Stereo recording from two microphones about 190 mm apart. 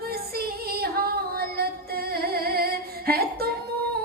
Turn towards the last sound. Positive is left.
turn(degrees=-55)  # may be behind; listen again after turning